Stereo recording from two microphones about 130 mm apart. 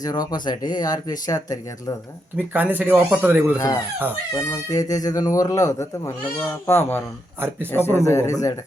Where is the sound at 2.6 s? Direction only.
15° right (ahead or behind).